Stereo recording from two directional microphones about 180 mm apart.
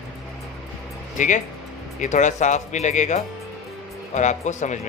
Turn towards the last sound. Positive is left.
turn(degrees=40)  # may be behind; listen again after turning